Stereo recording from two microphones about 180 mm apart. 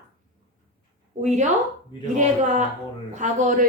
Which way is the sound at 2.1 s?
45° right (ahead or behind).